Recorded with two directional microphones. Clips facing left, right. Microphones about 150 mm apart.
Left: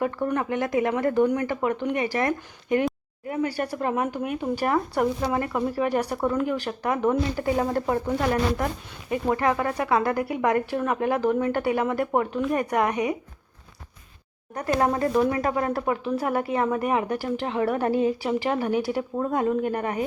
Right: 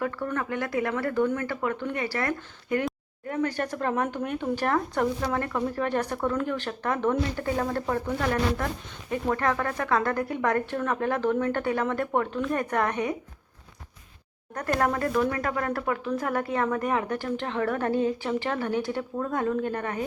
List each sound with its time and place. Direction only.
0.0 s speech: 20° left (ahead or behind)
14.5 s speech: 10° left (ahead or behind)
14.8 s speech: 25° left (ahead or behind)